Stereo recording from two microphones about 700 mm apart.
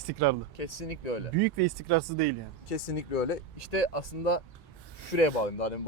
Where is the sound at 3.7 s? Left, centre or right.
Left.